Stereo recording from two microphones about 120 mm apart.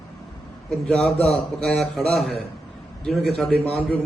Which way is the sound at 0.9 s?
5° left (ahead or behind).